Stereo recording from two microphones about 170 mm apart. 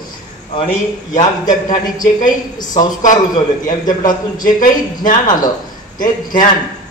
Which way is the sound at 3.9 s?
50° left (ahead or behind).